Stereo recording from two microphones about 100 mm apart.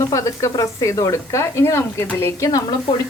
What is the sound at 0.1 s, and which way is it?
A woman's voice, 35° left (ahead or behind).